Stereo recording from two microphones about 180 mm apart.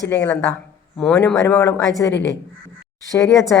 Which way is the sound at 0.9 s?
5° left (ahead or behind).